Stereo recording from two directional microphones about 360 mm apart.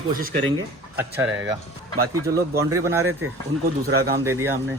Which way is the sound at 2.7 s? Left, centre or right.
Centre.